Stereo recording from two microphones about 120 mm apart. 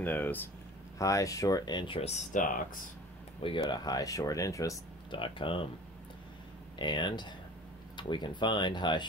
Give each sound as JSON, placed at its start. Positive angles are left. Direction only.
{"t": 0.0, "sound": "speech", "side_deg": 15}
{"t": 0.9, "sound": "speech", "side_deg": 25}
{"t": 3.4, "sound": "speech", "side_deg": 50}
{"t": 3.7, "sound": "speech", "side_deg": 35}
{"t": 5.1, "sound": "speech", "side_deg": 45}
{"t": 6.8, "sound": "speech", "side_deg": 40}